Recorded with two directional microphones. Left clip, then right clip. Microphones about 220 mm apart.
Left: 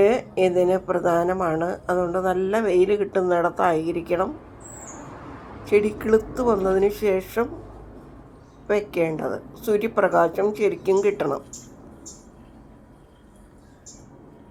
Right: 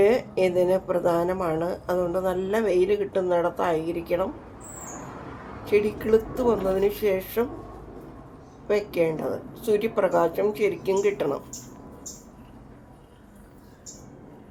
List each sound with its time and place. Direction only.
0.0 s speech: 10° left (ahead or behind)
5.6 s a woman's voice: 20° left (ahead or behind)
8.6 s speech: 15° left (ahead or behind)